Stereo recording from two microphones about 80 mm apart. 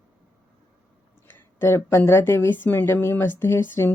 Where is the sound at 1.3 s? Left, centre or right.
Left.